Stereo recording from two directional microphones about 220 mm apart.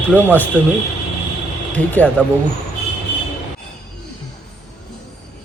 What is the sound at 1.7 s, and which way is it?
Speech, 5° left (ahead or behind).